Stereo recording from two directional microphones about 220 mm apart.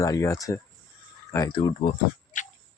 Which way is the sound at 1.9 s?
35° left (ahead or behind).